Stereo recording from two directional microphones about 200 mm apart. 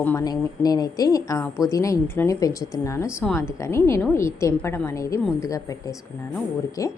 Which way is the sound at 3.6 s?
15° left (ahead or behind).